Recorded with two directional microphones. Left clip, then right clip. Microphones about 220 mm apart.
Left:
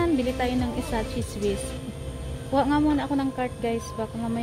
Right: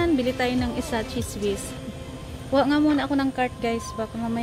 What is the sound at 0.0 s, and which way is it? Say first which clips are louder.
A woman's voice: right 2 dB; centre (ahead or behind).